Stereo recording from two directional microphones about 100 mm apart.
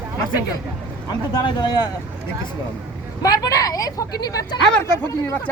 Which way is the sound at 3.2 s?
35° left (ahead or behind).